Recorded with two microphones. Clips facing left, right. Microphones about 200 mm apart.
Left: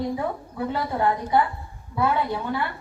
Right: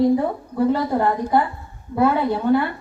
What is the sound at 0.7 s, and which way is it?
A woman's voice, 45° right (ahead or behind).